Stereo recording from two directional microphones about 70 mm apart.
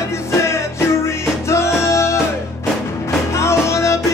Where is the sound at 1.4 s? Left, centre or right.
Left.